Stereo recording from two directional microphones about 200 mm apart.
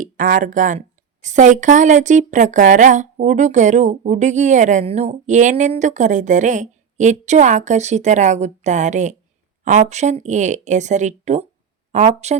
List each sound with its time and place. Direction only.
0.0 s a woman's voice: 40° right (ahead or behind)